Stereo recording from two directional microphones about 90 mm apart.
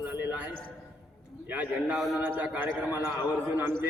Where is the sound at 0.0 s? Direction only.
20° right (ahead or behind).